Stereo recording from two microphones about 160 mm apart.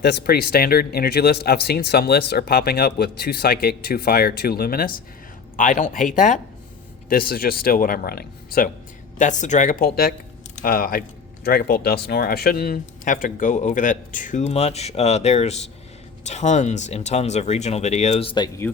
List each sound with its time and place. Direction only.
0.0 s speech: 90° left; by 4.9 s 70° left (ahead or behind)
5.5 s speech: 55° left (ahead or behind)
7.1 s speech: 65° left (ahead or behind)
9.1 s speech: 50° left (ahead or behind); by 18.6 s 25° left (ahead or behind)